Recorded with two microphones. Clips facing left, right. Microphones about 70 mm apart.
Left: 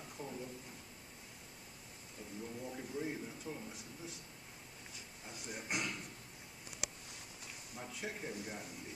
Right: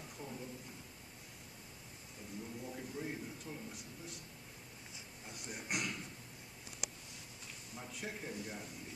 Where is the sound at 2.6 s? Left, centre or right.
Centre.